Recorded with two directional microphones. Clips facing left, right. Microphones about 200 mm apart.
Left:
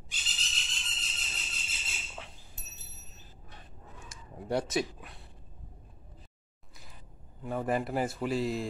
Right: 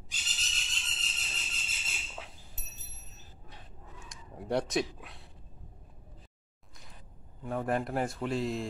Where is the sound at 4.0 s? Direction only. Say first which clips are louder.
Even; centre (ahead or behind).